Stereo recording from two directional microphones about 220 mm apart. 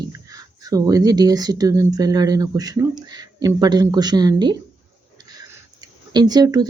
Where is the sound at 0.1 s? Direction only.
15° right (ahead or behind).